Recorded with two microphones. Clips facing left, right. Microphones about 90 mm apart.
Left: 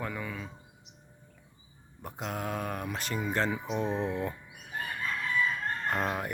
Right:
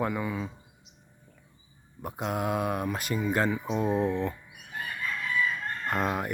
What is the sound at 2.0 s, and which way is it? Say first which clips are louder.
Speech: right 5 dB; 5° right (ahead or behind).